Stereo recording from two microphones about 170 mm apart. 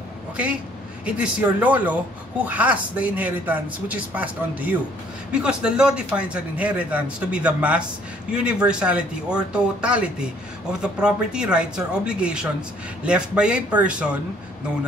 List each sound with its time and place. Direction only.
1.0 s speech: 10° right (ahead or behind)